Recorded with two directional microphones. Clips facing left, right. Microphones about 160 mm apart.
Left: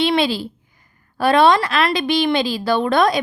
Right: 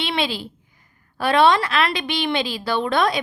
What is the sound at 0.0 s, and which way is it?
A woman's voice, 40° left (ahead or behind).